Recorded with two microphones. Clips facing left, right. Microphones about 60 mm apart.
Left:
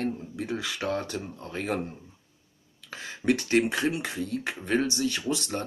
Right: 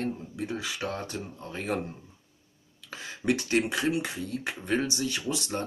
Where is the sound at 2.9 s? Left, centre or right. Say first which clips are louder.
Left 2 dB; left.